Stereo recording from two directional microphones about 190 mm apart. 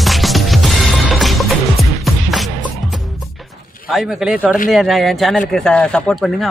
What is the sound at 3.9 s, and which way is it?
Speech, centre (ahead or behind).